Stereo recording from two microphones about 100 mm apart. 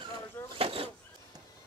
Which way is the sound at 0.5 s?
65° right (ahead or behind).